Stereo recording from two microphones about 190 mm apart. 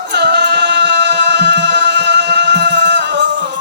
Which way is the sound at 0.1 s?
65° right (ahead or behind).